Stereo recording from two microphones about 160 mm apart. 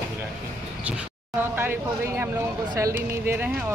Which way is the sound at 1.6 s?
15° right (ahead or behind).